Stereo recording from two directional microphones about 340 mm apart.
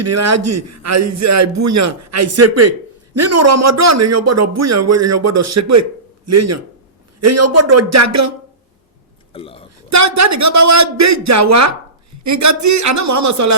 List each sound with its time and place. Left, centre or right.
0.0 s a man's voice: right
9.3 s hiccup: centre
9.9 s a man's voice: right